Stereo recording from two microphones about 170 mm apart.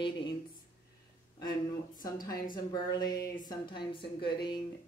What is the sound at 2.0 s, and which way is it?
Speech, 20° left (ahead or behind).